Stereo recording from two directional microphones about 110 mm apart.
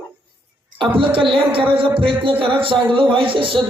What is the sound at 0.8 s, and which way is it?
A man's voice, 50° right (ahead or behind).